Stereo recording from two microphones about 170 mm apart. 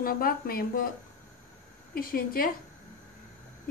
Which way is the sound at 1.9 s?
60° left (ahead or behind).